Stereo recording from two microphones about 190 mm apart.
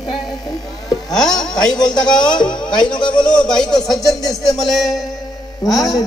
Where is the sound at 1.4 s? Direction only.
5° left (ahead or behind).